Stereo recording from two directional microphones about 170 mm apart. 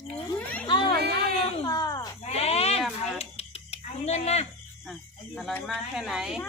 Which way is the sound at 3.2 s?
40° left (ahead or behind).